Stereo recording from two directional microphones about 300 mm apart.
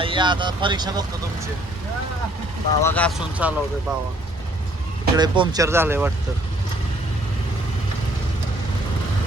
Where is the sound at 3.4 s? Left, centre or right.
Centre.